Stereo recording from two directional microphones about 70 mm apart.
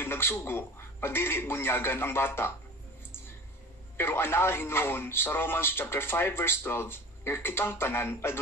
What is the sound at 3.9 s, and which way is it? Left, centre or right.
Speech, left.